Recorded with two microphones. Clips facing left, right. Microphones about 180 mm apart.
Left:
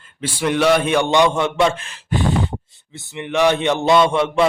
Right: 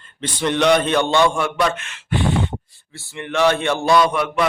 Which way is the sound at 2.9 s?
20° left (ahead or behind).